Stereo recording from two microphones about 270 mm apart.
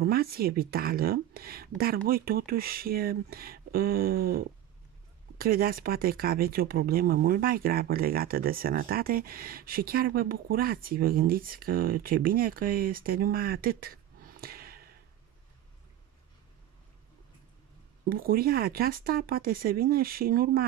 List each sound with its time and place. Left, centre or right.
0.0 s speech: right
18.0 s speech: right